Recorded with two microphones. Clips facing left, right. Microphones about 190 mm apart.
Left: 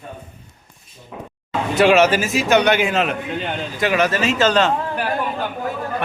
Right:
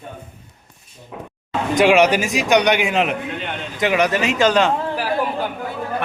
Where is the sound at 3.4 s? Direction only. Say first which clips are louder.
Left 3 dB; 35° left (ahead or behind).